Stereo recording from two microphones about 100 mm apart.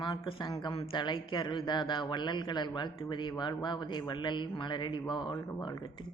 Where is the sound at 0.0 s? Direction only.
55° left (ahead or behind).